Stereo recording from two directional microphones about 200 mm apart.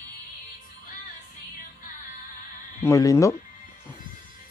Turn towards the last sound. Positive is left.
turn(degrees=15)  # may be behind; listen again after turning